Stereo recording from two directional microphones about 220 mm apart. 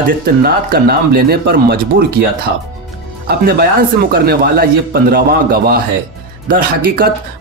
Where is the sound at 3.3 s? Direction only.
45° right (ahead or behind).